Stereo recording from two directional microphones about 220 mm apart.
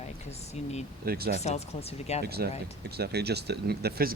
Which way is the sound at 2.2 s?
45° right (ahead or behind).